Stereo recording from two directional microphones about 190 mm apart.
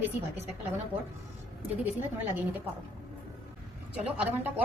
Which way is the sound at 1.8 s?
10° right (ahead or behind).